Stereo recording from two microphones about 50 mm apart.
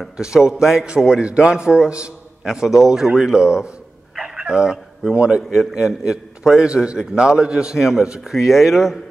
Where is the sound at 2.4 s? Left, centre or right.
Centre.